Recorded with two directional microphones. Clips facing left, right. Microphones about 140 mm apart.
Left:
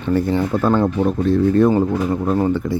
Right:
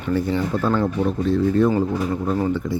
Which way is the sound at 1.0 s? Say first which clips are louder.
Left 3 dB; 55° left (ahead or behind).